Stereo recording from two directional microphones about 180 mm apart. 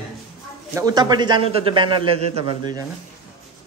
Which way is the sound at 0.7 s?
20° right (ahead or behind).